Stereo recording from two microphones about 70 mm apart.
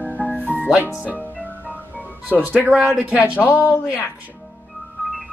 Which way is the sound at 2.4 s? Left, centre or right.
Centre.